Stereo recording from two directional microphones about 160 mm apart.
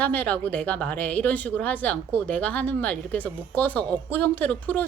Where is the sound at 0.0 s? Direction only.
10° left (ahead or behind).